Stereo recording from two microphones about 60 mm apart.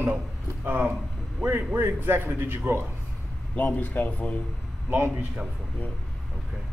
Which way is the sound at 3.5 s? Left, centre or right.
Left.